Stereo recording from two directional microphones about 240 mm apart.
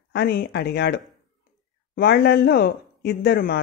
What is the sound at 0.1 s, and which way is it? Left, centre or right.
Speech, left.